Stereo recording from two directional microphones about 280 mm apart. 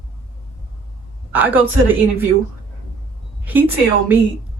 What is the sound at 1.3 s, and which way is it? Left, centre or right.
Speech, centre.